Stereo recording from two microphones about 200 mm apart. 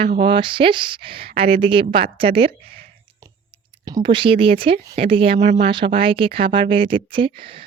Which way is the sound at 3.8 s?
20° right (ahead or behind).